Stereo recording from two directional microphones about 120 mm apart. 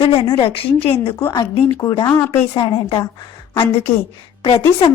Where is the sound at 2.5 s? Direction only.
45° left (ahead or behind).